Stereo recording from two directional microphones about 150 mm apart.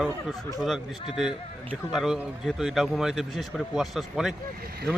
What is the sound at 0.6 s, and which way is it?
Speech, centre (ahead or behind).